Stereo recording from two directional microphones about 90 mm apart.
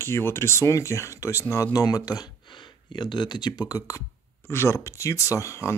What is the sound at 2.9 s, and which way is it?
Speech, 60° left (ahead or behind).